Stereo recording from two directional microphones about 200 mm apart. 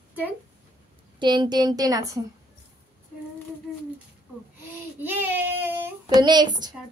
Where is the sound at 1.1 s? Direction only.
20° right (ahead or behind).